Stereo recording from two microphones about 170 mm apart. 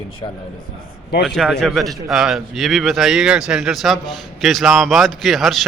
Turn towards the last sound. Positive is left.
turn(degrees=0)  # may be behind; listen again after turning